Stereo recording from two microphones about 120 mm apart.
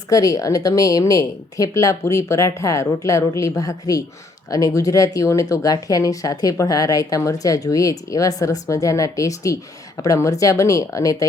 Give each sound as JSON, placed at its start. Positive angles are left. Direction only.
{"t": 0.1, "sound": "speech", "side_deg": 30}